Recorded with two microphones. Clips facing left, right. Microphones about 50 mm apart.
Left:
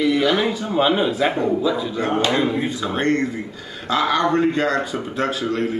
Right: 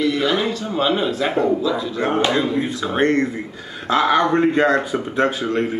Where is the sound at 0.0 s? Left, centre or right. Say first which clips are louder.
Left 1 dB; centre.